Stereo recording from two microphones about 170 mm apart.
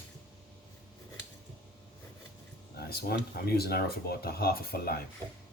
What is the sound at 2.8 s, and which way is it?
Speech, 65° left (ahead or behind).